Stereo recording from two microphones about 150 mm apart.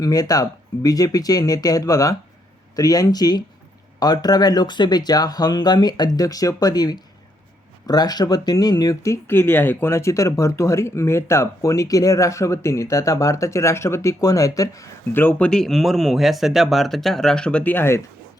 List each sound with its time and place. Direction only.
0.0 s speech: 25° left (ahead or behind)